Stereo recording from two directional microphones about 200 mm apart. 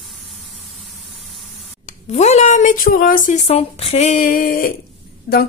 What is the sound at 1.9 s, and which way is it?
A woman's voice, 35° left (ahead or behind).